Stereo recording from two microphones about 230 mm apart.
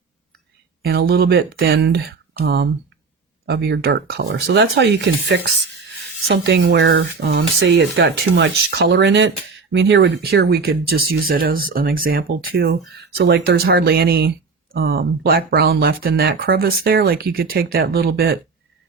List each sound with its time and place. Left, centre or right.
0.8 s speech: right